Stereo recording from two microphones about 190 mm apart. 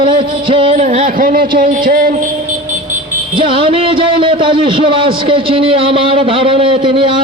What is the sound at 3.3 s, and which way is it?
Music, 25° right (ahead or behind).